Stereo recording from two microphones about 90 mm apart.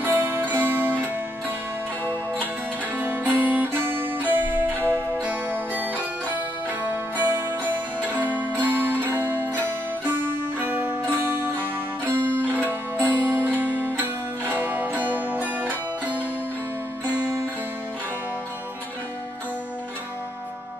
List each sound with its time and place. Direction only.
0.0 s music: 25° right (ahead or behind)
3.0 s music: 20° right (ahead or behind)